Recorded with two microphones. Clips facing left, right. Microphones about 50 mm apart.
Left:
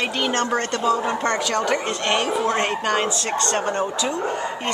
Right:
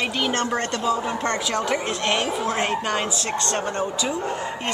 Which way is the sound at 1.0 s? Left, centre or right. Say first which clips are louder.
Left 3 dB; centre.